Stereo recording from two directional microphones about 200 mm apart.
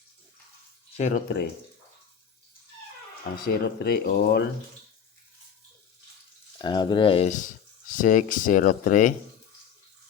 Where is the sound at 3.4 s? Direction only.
50° left (ahead or behind).